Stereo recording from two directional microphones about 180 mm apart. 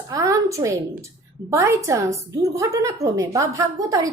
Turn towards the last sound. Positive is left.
turn(degrees=-20)  # may be behind; listen again after turning